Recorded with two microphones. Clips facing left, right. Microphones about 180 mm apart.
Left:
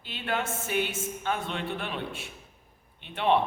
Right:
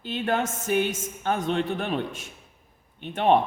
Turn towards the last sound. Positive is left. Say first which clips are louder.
# right 4 dB
turn(degrees=-45)  # may be behind; listen again after turning